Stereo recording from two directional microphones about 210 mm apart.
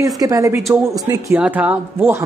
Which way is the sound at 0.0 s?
15° right (ahead or behind).